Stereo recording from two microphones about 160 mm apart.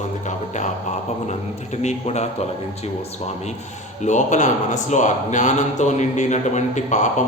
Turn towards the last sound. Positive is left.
turn(degrees=50)  # may be behind; listen again after turning